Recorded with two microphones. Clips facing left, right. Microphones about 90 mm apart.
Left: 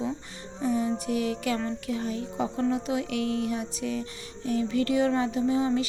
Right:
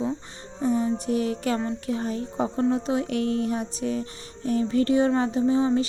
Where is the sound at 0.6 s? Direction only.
30° right (ahead or behind).